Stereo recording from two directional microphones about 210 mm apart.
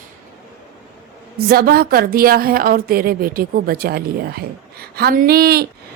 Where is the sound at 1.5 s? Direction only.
45° right (ahead or behind).